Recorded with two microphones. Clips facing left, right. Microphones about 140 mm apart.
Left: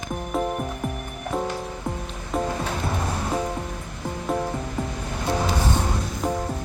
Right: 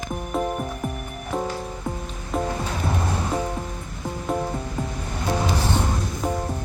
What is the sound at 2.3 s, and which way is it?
Music, centre (ahead or behind).